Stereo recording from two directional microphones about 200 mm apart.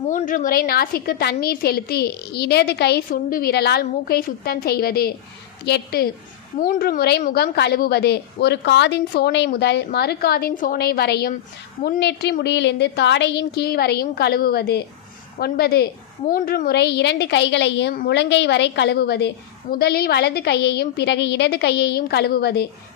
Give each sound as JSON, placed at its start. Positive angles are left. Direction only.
{"t": 0.1, "sound": "a woman's voice", "side_deg": 40}